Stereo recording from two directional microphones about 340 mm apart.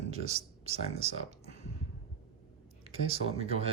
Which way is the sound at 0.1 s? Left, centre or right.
Centre.